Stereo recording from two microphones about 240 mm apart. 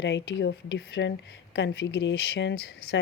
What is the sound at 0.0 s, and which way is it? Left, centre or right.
Speech, left.